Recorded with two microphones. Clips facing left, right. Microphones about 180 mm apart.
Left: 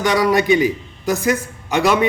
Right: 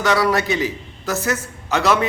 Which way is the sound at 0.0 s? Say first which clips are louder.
Left 2 dB; 15° left (ahead or behind).